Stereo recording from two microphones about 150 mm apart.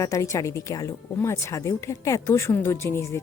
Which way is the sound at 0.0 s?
20° left (ahead or behind).